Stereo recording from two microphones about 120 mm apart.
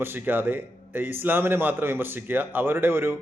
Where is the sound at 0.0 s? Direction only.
15° right (ahead or behind).